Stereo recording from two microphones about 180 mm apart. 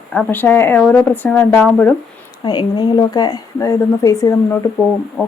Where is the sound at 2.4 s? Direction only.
25° left (ahead or behind); by 5.3 s 10° left (ahead or behind).